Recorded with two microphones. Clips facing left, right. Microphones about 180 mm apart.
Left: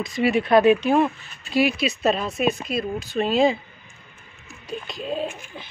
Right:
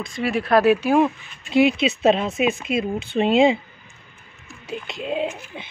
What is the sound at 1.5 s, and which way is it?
Speech, 20° right (ahead or behind).